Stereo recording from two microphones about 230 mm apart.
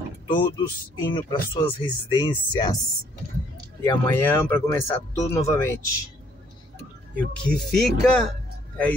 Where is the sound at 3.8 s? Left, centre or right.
Centre.